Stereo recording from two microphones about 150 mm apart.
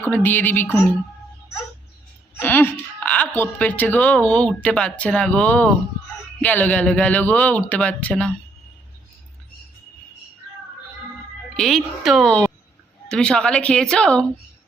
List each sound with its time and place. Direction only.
0.0 s a woman's voice: 10° left (ahead or behind)
2.4 s a woman's voice: 10° left (ahead or behind)
11.5 s speech: centre (ahead or behind)